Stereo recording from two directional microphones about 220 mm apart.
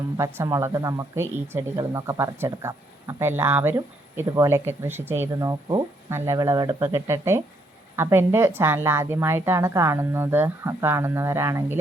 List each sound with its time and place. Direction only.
0.2 s speech: 15° right (ahead or behind)